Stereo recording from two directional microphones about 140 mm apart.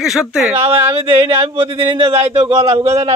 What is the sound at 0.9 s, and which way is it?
A woman's voice, 40° right (ahead or behind).